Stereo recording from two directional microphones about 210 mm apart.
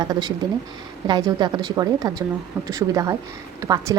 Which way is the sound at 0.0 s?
20° right (ahead or behind).